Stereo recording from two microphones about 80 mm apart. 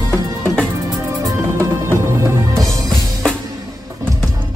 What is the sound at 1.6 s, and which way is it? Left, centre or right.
Music, right.